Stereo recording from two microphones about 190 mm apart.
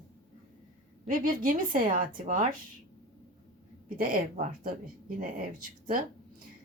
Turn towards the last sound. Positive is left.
turn(degrees=-45)  # may be behind; listen again after turning